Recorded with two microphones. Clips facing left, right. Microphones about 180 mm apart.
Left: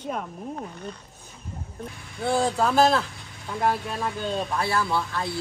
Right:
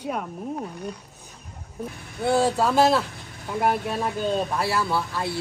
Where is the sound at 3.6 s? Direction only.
20° right (ahead or behind).